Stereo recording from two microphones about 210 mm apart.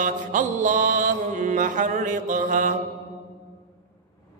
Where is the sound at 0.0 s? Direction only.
40° right (ahead or behind).